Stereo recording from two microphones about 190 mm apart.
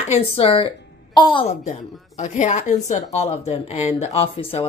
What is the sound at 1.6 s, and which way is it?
A woman's voice, 40° left (ahead or behind).